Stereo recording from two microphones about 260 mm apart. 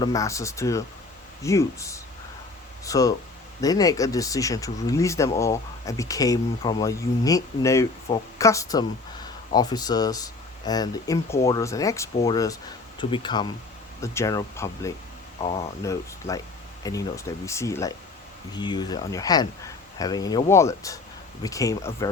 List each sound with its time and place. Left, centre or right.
0.0 s speech: centre